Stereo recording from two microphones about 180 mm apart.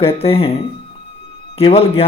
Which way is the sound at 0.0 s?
35° left (ahead or behind).